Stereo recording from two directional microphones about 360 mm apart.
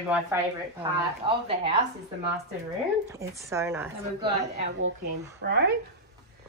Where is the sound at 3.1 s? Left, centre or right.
Centre.